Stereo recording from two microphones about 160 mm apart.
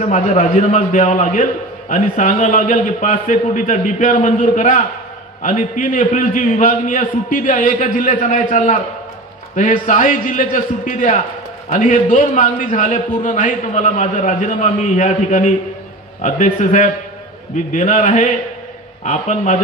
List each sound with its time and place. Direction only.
0.1 s a man's voice: 50° left (ahead or behind)